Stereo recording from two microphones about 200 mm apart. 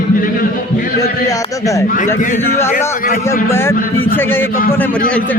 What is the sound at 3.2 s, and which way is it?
A man's voice, 10° left (ahead or behind).